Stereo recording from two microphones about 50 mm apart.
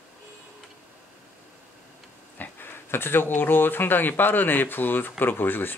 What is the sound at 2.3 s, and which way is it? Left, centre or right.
Speech, left.